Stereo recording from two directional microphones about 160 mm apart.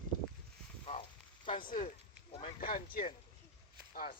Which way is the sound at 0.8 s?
40° left (ahead or behind).